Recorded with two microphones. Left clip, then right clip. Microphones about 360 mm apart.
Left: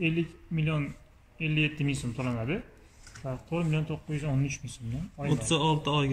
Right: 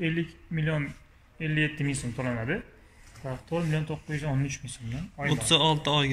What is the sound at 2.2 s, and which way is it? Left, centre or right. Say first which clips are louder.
Speech: right 4 dB; right.